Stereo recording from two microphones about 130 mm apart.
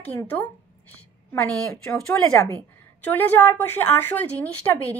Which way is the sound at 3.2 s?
15° left (ahead or behind).